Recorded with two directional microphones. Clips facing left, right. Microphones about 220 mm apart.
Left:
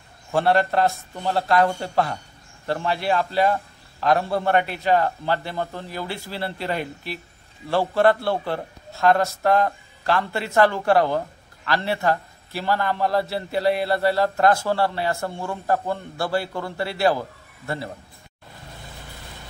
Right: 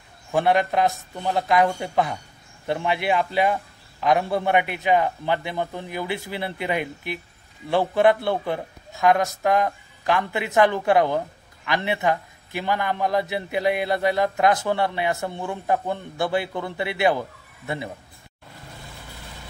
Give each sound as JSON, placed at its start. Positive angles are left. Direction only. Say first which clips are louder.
{"t": 0.3, "sound": "a man's voice", "louder": "left 1 dB", "side_deg": -15}